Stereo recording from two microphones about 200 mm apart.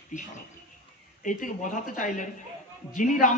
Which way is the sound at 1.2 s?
40° left (ahead or behind).